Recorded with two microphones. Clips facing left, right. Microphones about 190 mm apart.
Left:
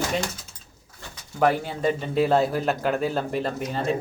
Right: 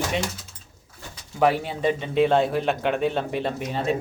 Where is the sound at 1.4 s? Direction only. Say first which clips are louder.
Right 1 dB; centre (ahead or behind).